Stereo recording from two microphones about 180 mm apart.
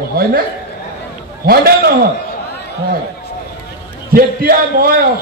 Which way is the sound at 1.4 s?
55° right (ahead or behind).